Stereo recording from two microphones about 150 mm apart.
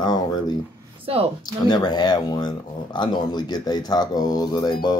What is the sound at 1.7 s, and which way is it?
Speech, 30° left (ahead or behind).